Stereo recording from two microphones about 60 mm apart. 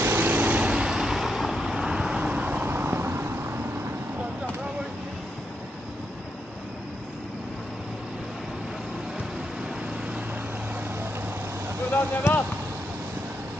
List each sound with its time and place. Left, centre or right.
0.0 s vehicle: right
0.6 s vehicle: centre
2.7 s vehicle: right
11.9 s speech: left